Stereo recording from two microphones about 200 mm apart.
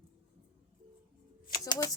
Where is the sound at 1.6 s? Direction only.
15° left (ahead or behind).